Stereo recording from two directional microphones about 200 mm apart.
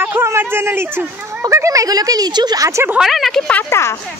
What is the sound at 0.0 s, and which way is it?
Speech, 10° right (ahead or behind).